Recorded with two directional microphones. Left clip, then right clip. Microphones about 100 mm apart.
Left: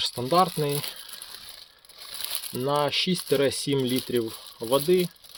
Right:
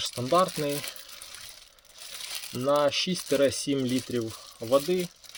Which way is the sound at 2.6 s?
40° left (ahead or behind).